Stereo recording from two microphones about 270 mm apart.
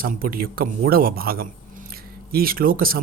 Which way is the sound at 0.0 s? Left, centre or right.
Right.